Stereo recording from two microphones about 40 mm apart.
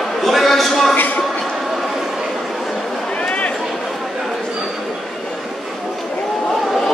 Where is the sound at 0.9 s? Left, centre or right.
Left.